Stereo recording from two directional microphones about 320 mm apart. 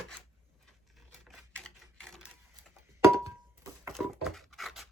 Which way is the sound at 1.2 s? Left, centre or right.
Centre.